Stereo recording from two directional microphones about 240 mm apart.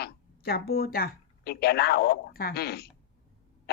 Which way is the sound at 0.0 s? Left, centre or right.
Left.